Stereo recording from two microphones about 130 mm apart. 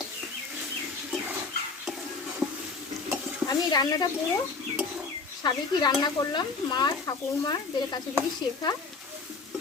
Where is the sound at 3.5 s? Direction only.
30° left (ahead or behind).